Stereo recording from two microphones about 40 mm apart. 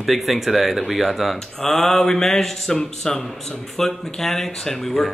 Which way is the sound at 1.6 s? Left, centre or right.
Centre.